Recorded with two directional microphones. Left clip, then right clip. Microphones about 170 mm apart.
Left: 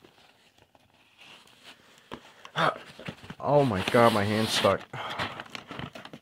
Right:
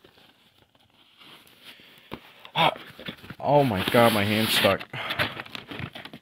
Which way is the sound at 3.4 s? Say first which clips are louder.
Right 3 dB; 15° right (ahead or behind).